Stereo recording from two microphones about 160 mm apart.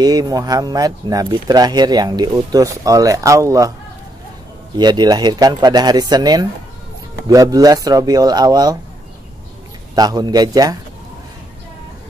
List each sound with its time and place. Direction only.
0.0 s speech: 25° right (ahead or behind)
4.7 s speech: 25° right (ahead or behind)
9.9 s speech: 25° right (ahead or behind)